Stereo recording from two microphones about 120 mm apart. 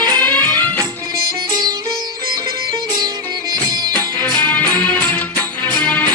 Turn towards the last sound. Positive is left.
turn(degrees=15)  # may be behind; listen again after turning